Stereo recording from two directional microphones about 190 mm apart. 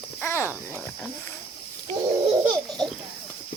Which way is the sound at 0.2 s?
15° left (ahead or behind).